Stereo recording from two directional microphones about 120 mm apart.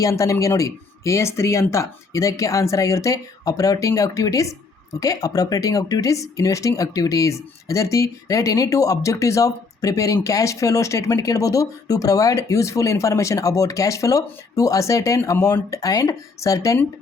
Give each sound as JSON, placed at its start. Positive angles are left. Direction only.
{"t": 0.0, "sound": "speech", "side_deg": 25}